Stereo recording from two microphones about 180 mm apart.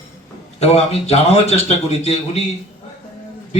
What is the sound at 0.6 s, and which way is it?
Speech, 35° left (ahead or behind).